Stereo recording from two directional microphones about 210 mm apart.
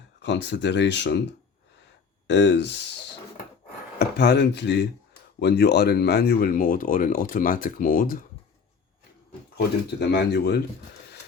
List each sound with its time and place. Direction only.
0.2 s speech: 55° left (ahead or behind)
2.2 s speech: 55° left (ahead or behind)
3.9 s speech: 50° left (ahead or behind)
9.6 s speech: 55° left (ahead or behind)